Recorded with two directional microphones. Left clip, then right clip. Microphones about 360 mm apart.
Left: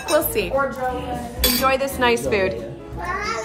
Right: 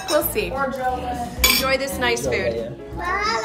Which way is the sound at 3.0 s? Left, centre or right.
Centre.